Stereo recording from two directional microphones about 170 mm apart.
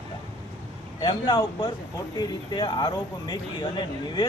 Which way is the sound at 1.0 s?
25° left (ahead or behind).